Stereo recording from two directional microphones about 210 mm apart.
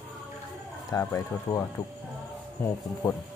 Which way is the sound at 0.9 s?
15° left (ahead or behind).